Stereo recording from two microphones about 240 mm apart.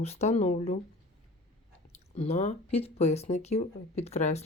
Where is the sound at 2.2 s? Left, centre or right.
Left.